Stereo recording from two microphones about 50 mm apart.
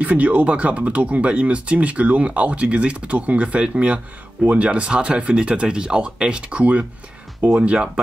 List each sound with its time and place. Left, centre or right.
0.0 s speech: right